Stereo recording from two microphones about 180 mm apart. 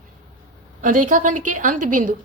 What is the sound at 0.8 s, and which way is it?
A woman's voice, 45° right (ahead or behind).